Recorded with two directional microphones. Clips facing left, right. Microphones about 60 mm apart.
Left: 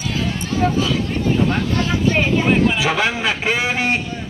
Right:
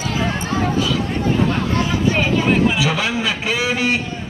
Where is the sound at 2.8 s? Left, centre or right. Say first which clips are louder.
Left 1 dB; left.